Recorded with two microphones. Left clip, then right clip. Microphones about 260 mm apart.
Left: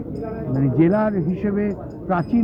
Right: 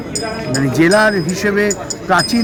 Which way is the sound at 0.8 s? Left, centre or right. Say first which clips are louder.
Right 11 dB; centre.